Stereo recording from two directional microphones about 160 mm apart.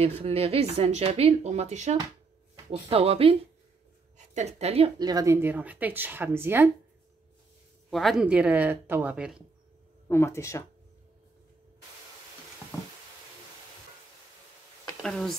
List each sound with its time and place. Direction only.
0.0 s a woman's voice: 40° right (ahead or behind); by 6.7 s 15° right (ahead or behind)
7.9 s a woman's voice: centre (ahead or behind)
10.0 s speech: 15° left (ahead or behind)
15.0 s speech: centre (ahead or behind)